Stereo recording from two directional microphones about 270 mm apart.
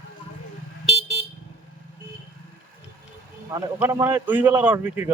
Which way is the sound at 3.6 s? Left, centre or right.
Centre.